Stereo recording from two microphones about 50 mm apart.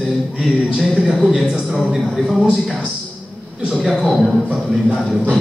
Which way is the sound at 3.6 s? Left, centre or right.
Centre.